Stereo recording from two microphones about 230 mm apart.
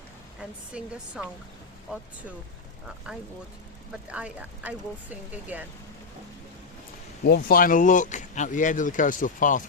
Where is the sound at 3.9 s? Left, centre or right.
Centre.